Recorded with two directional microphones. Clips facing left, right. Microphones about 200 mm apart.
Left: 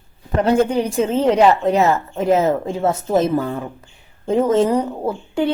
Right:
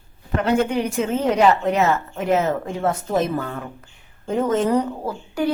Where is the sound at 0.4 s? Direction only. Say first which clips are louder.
Left 3 dB; 35° left (ahead or behind).